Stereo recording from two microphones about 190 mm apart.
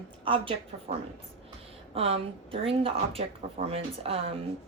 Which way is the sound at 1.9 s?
30° right (ahead or behind).